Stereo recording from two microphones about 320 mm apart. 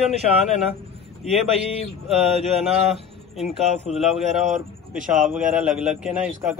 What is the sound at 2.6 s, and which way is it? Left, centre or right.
A man's voice, centre.